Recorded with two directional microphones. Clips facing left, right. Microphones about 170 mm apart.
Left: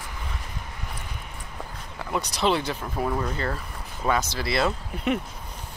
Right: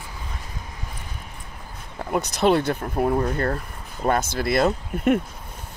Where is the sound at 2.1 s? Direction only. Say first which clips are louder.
Right 5 dB; 50° right (ahead or behind).